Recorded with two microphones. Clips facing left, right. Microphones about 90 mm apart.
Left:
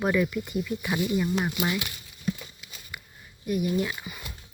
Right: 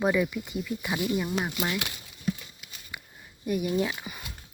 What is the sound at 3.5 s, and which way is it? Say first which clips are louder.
Speech: even; 30° right (ahead or behind).